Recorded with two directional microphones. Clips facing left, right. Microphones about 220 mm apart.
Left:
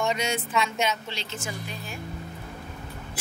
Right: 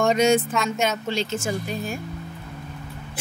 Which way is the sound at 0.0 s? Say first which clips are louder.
Right 9 dB; 45° right (ahead or behind).